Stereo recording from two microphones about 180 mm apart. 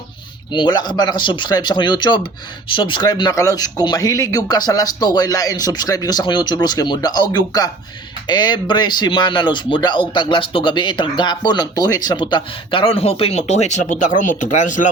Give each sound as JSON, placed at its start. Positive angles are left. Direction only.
{"t": 0.5, "sound": "speech", "side_deg": 25}